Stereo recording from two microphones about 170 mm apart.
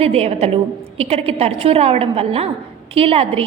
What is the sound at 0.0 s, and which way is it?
A woman's voice, 35° right (ahead or behind).